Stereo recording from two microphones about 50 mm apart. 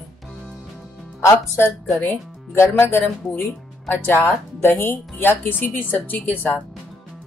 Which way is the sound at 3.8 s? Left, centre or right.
Left.